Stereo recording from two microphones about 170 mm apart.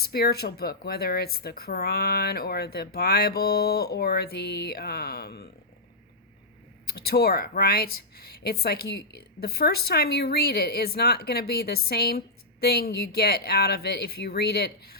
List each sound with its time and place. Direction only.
0.0 s speech: 65° left (ahead or behind)
6.8 s speech: 65° left (ahead or behind)